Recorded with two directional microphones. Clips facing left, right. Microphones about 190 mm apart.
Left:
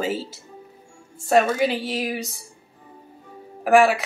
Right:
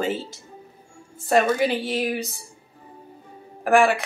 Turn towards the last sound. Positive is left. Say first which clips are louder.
# left 2 dB
turn(degrees=5)  # may be behind; listen again after turning